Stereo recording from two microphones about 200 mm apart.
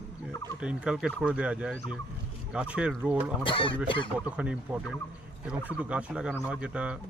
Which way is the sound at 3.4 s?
25° left (ahead or behind).